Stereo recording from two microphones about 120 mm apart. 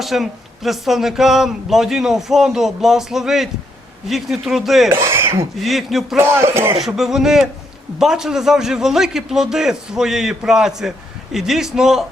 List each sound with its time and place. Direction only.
0.0 s a man's voice: centre (ahead or behind)
4.9 s speech: 20° right (ahead or behind)
5.5 s a man's voice: centre (ahead or behind)
6.1 s a man's voice: 20° right (ahead or behind)
6.8 s a man's voice: centre (ahead or behind)